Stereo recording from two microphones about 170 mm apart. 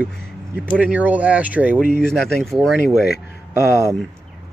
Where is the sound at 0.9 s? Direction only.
10° right (ahead or behind).